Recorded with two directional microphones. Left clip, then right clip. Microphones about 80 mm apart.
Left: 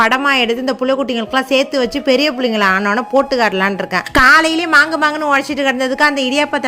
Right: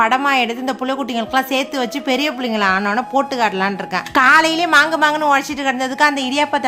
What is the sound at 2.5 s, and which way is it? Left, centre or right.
Speech, left.